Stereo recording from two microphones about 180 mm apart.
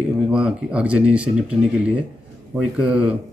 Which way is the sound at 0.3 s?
5° right (ahead or behind).